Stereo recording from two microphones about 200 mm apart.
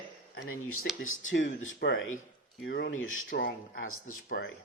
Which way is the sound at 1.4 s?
40° left (ahead or behind).